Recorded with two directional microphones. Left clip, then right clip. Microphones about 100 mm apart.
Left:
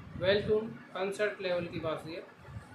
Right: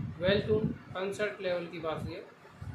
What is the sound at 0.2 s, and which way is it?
A man's voice, 10° left (ahead or behind).